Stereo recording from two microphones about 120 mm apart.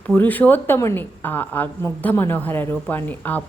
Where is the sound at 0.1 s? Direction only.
15° left (ahead or behind).